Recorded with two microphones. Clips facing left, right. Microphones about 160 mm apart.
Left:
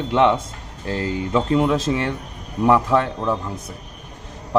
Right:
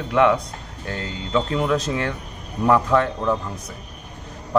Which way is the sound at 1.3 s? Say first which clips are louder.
Left 3 dB; 10° left (ahead or behind).